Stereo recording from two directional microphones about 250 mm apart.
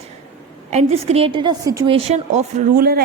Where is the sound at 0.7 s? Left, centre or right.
Right.